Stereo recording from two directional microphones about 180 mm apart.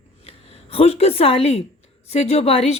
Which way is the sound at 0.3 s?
35° left (ahead or behind).